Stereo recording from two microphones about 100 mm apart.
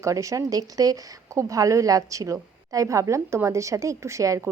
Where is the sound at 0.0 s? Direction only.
30° right (ahead or behind).